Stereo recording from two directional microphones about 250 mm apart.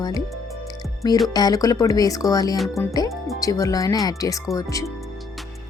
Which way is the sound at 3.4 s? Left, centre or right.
Centre.